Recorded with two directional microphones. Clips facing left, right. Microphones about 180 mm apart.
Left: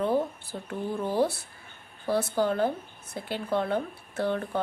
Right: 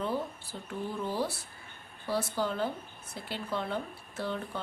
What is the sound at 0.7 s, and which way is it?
Speech, 55° left (ahead or behind).